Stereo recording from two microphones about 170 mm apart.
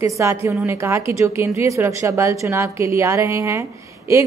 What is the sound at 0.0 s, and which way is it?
A woman's voice, 15° right (ahead or behind).